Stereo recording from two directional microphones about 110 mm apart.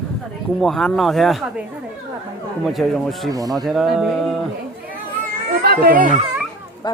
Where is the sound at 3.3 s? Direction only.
35° right (ahead or behind).